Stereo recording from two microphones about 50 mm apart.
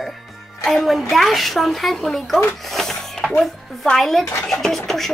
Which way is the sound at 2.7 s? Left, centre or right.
Centre.